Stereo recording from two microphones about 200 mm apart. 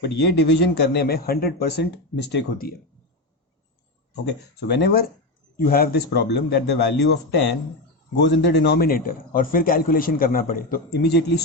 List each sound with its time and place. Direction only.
0.0 s a man's voice: 55° left (ahead or behind)
4.8 s a man's voice: 50° left (ahead or behind)